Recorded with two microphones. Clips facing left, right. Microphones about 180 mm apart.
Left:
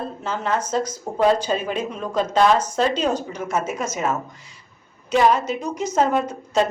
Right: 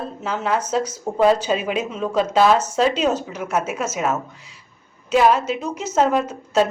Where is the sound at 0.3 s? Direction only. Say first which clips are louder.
Right 2 dB; 10° right (ahead or behind).